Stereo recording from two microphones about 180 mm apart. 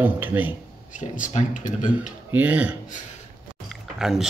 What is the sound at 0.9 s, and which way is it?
A man's voice, 45° left (ahead or behind).